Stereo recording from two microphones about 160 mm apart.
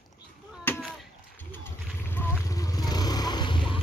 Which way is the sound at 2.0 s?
15° left (ahead or behind).